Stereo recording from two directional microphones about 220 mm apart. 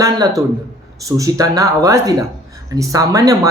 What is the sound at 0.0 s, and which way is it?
Speech, 15° right (ahead or behind).